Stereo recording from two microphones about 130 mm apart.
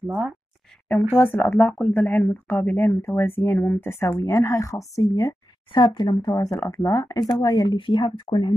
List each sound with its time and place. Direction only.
0.0 s speech: 10° right (ahead or behind)
1.1 s a woman's voice: 15° left (ahead or behind)
5.7 s speech: 40° left (ahead or behind)